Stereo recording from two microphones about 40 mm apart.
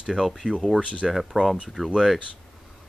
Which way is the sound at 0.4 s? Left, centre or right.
Centre.